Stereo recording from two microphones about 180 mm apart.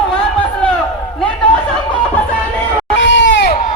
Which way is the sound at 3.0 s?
85° left.